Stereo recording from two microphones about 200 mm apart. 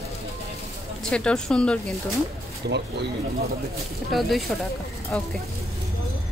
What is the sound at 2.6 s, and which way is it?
Speech, 55° right (ahead or behind).